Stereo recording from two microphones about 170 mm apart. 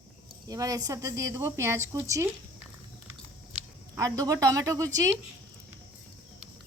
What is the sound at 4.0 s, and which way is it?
A woman's voice, 20° right (ahead or behind).